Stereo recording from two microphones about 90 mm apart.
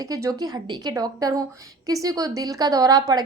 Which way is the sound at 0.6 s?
55° right (ahead or behind).